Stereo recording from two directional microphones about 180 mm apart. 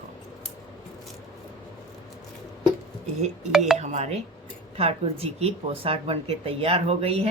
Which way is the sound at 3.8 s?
40° right (ahead or behind).